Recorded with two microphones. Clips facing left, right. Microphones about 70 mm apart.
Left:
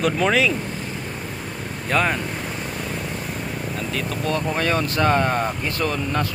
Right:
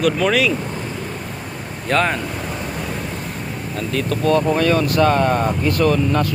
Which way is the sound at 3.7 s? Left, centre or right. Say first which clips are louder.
Right 8 dB; centre.